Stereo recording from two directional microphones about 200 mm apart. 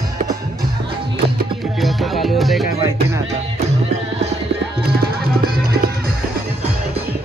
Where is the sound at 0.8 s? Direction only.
50° right (ahead or behind).